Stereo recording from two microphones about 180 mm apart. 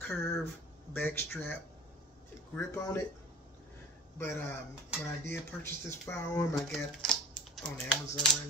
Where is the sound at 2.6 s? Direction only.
15° left (ahead or behind).